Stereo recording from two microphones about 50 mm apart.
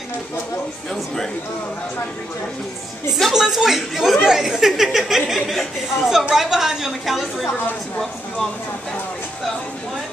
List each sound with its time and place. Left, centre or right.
3.1 s a woman's voice: centre